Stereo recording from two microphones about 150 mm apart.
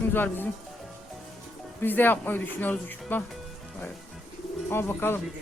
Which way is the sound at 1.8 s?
15° left (ahead or behind).